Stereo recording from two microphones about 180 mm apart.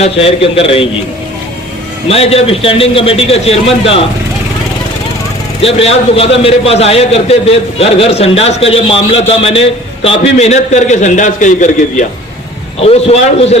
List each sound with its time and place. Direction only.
0.0 s a man's voice: 30° left (ahead or behind)
2.0 s a man's voice: 35° left (ahead or behind)
5.6 s a man's voice: 35° left (ahead or behind)
12.8 s a man's voice: 35° left (ahead or behind)